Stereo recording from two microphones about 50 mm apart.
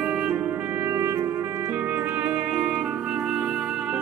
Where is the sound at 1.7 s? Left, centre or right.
Right.